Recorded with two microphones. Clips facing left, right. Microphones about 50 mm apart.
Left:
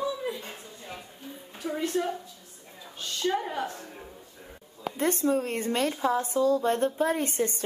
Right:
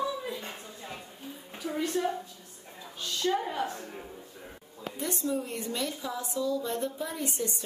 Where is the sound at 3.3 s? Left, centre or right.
Centre.